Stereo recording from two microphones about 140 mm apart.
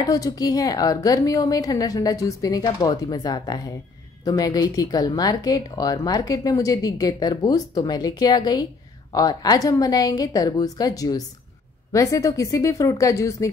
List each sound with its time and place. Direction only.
0.0 s speech: 25° left (ahead or behind)